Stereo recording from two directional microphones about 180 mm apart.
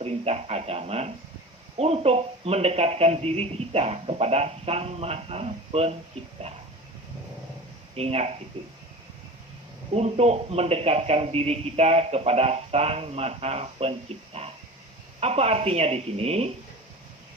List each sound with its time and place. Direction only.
0.0 s a man's voice: 35° right (ahead or behind)
7.9 s a man's voice: 35° right (ahead or behind)
9.9 s a man's voice: 35° right (ahead or behind)